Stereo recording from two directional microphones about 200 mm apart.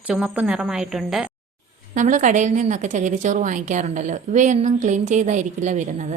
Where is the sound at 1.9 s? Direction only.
40° right (ahead or behind).